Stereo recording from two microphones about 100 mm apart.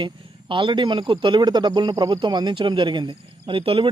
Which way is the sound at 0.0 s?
55° right (ahead or behind).